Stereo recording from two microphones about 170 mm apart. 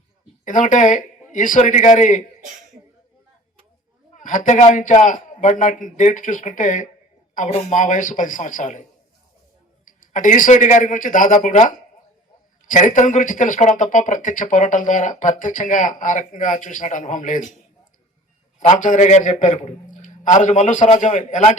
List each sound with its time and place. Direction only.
0.4 s speech: 50° left (ahead or behind)
4.1 s speech: 50° left (ahead or behind)
9.8 s a man's voice: 50° left (ahead or behind)
18.7 s speech: 45° left (ahead or behind)